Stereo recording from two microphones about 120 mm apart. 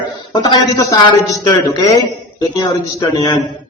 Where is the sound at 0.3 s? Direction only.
30° left (ahead or behind).